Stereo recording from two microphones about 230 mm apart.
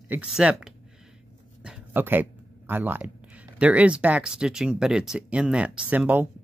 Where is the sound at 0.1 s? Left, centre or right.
Centre.